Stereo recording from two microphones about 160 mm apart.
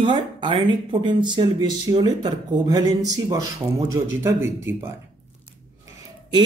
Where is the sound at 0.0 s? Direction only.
30° right (ahead or behind); by 4.8 s 15° right (ahead or behind).